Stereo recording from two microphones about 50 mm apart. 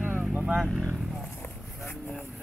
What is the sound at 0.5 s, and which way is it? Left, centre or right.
Speech, centre.